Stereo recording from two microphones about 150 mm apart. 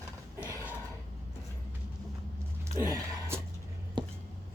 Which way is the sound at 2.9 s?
15° right (ahead or behind).